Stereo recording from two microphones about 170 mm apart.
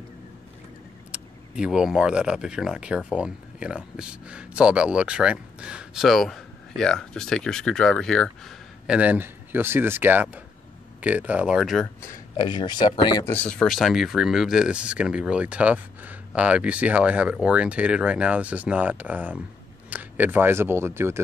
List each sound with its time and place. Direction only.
1.1 s speech: 5° right (ahead or behind)
12.4 s speech: 25° left (ahead or behind)
13.2 s speech: 10° left (ahead or behind); by 21.2 s 15° right (ahead or behind)